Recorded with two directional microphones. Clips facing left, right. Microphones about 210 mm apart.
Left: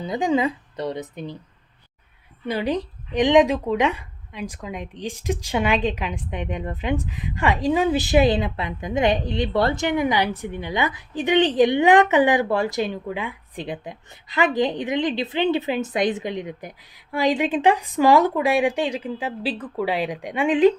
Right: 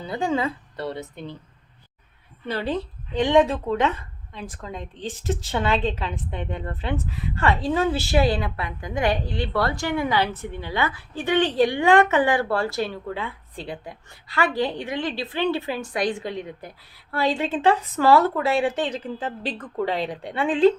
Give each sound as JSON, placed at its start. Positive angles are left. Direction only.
{"t": 0.0, "sound": "speech", "side_deg": 15}
{"t": 2.5, "sound": "speech", "side_deg": 15}